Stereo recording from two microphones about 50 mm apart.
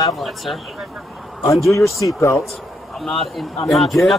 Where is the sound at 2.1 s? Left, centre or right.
Left.